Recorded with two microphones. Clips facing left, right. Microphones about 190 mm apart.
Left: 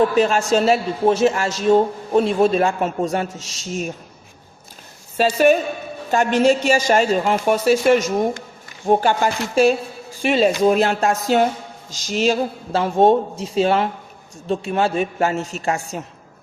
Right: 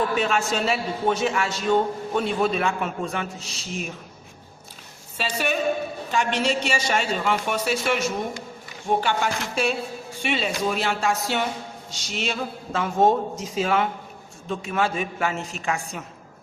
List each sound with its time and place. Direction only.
0.2 s a man's voice: 40° left (ahead or behind)
5.1 s a woman's voice: 45° left (ahead or behind)